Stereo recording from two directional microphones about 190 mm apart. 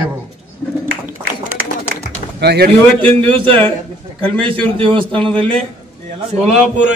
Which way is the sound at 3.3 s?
10° left (ahead or behind).